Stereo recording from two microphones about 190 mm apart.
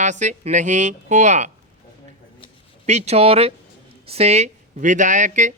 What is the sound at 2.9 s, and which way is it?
A woman's voice, 35° right (ahead or behind).